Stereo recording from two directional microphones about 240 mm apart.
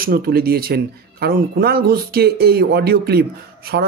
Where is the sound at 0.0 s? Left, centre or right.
Right.